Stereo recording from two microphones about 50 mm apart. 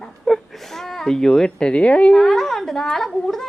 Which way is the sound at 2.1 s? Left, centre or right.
Centre.